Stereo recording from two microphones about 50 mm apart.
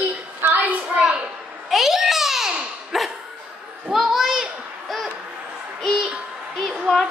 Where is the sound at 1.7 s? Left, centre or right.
Centre.